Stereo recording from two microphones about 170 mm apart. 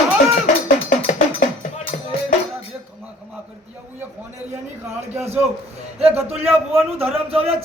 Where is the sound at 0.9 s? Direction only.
50° left (ahead or behind).